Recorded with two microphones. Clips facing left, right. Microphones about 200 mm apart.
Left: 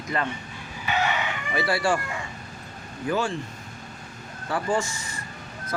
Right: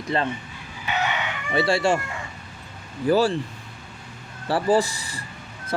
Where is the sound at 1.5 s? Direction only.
25° right (ahead or behind).